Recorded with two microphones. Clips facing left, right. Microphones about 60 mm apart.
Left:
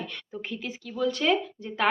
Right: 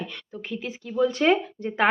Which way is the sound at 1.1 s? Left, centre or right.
Right.